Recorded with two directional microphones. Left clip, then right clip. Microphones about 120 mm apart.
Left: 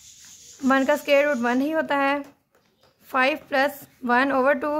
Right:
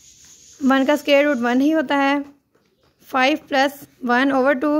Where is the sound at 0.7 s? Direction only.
30° right (ahead or behind).